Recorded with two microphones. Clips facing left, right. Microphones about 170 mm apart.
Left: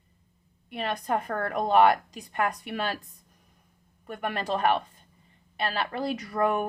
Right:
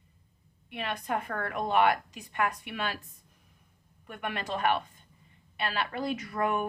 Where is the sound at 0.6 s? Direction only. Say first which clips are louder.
Left 4 dB; 40° left (ahead or behind).